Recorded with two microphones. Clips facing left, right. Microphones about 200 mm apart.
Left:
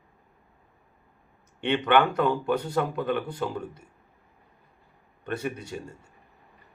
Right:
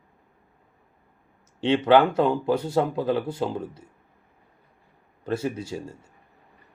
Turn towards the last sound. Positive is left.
turn(degrees=-30)  # may be behind; listen again after turning